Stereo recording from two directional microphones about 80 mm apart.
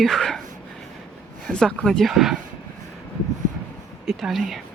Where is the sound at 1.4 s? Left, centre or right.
Centre.